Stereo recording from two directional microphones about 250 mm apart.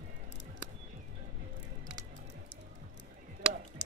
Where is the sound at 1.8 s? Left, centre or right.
Right.